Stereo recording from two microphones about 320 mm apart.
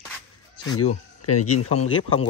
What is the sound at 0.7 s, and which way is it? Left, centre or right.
Speech, left.